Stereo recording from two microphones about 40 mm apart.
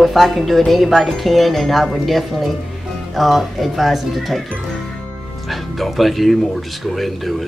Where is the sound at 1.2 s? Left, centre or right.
Centre.